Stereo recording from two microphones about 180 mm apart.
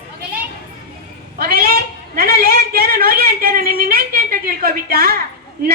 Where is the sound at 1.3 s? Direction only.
55° right (ahead or behind).